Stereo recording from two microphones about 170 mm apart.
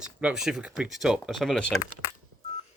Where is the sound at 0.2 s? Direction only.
5° right (ahead or behind).